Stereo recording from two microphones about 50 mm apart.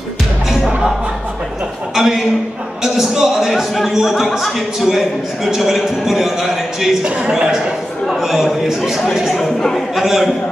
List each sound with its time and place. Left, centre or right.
2.0 s a man's voice: centre
7.1 s a man's voice: right
8.1 s a man's voice: centre